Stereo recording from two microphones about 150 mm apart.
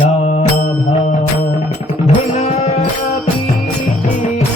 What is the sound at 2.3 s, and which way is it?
Music, 45° left (ahead or behind).